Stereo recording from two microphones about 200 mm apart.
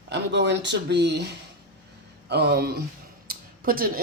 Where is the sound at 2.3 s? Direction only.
55° right (ahead or behind).